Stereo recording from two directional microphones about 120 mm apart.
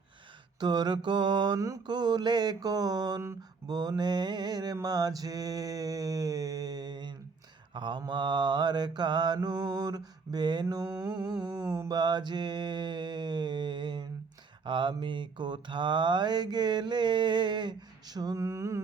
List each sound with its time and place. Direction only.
0.6 s mantra: 35° right (ahead or behind)